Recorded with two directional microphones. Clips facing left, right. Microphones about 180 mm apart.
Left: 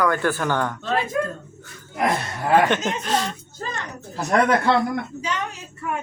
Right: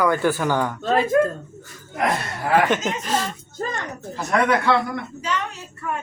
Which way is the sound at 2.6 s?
5° right (ahead or behind).